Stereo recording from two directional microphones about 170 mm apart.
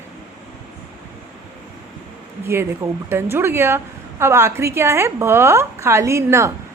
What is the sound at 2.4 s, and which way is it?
A woman's voice, 15° right (ahead or behind).